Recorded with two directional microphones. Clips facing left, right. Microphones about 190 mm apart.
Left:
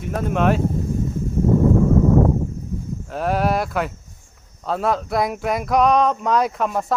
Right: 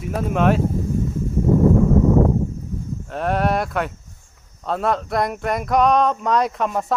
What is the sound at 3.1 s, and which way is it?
Speech, centre (ahead or behind).